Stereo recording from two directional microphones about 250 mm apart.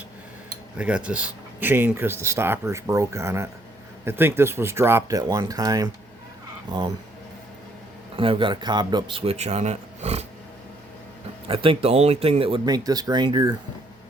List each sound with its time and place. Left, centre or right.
0.8 s speech: centre
8.1 s a man's voice: right
11.4 s a man's voice: right